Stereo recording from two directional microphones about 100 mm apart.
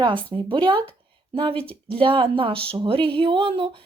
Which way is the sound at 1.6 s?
65° right (ahead or behind).